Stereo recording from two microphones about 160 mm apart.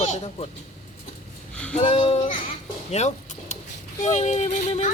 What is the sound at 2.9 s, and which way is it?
Vehicle, 45° left (ahead or behind).